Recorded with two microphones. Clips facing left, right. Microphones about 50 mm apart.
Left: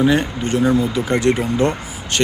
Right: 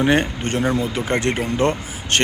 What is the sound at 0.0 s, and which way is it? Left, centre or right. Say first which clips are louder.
Speech: left 1 dB; right.